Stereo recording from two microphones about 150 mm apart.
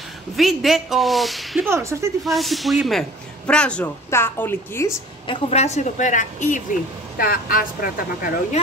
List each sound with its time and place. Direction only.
0.4 s speech: centre (ahead or behind)
1.7 s speech: 20° right (ahead or behind)
2.2 s speech: centre (ahead or behind); by 4.9 s 15° left (ahead or behind)
5.2 s a woman's voice: 40° left (ahead or behind)
7.2 s speech: 75° left (ahead or behind)